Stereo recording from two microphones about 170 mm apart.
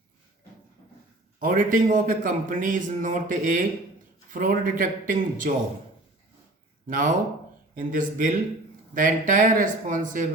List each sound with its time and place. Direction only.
1.4 s a man's voice: 55° right (ahead or behind)
6.8 s a man's voice: 50° right (ahead or behind)